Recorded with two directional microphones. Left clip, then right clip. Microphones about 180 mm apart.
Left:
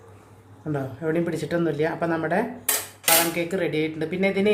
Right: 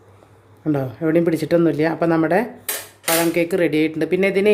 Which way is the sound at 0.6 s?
50° right (ahead or behind).